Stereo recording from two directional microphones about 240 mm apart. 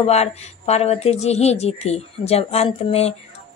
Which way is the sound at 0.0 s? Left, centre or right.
Left.